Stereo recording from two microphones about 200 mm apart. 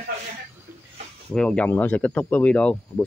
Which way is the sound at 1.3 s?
5° left (ahead or behind).